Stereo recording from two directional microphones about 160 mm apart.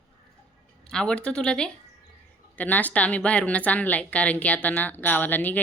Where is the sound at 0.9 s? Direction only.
5° left (ahead or behind).